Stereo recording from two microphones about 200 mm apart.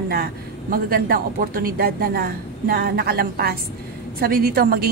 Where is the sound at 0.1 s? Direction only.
45° right (ahead or behind).